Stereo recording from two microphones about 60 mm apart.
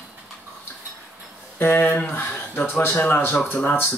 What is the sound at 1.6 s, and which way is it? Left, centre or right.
Speech, left.